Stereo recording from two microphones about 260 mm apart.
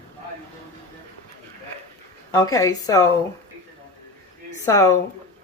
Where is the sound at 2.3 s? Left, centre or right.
Centre.